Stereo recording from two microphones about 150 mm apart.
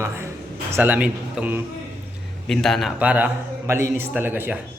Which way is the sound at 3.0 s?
10° right (ahead or behind).